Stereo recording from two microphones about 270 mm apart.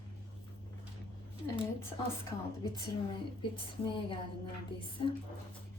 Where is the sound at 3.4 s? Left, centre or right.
Centre.